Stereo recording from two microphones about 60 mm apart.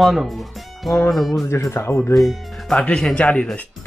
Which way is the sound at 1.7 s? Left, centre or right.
Left.